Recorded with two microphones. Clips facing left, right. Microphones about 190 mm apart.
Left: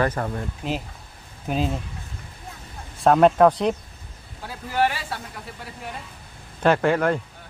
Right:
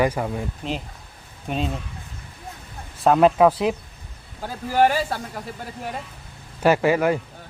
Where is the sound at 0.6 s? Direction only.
Centre (ahead or behind).